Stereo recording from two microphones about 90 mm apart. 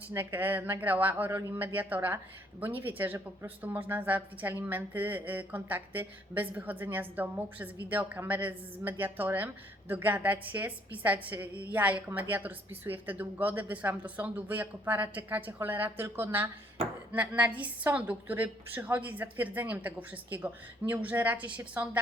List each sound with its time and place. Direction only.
0.2 s a woman's voice: 20° right (ahead or behind)